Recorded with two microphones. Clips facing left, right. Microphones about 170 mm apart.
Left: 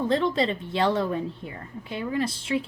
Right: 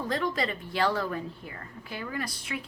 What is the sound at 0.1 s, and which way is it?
A woman's voice, 25° left (ahead or behind).